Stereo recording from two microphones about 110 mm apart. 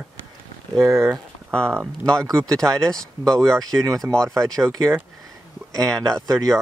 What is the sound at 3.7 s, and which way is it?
Speech, 20° right (ahead or behind).